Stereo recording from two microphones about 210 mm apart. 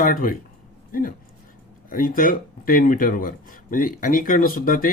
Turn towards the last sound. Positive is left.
turn(degrees=40)  # may be behind; listen again after turning